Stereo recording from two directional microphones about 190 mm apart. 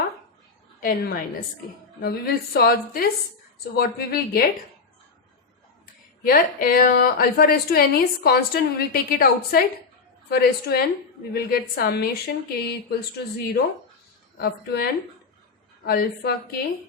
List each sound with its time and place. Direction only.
0.8 s a woman's voice: 50° left (ahead or behind)
6.2 s a woman's voice: 50° left (ahead or behind)
14.3 s a woman's voice: 55° left (ahead or behind)
15.9 s a woman's voice: 55° left (ahead or behind)